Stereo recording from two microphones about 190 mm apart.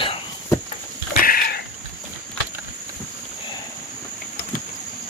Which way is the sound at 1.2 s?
50° left (ahead or behind).